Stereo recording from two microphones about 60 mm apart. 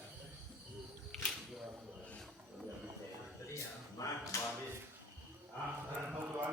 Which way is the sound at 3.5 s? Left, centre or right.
Left.